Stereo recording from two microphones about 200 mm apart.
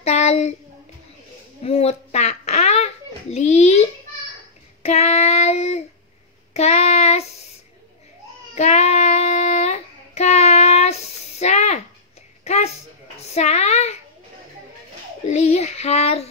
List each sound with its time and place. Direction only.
0.0 s speech: 35° left (ahead or behind)
1.6 s a child's voice: 30° left (ahead or behind)
4.8 s child singing: 35° left (ahead or behind)
8.5 s child singing: 35° left (ahead or behind)
12.4 s a sound: 35° left (ahead or behind)
15.2 s child singing: 35° left (ahead or behind)